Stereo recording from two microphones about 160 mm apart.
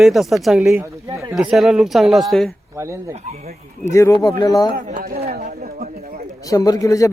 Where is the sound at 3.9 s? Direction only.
20° left (ahead or behind).